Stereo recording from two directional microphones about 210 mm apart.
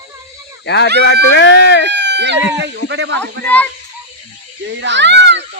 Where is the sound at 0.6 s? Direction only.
55° left (ahead or behind).